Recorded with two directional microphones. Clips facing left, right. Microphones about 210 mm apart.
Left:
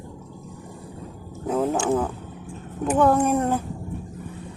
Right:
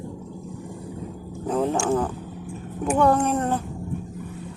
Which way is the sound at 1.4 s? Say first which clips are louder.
Even; 5° left (ahead or behind).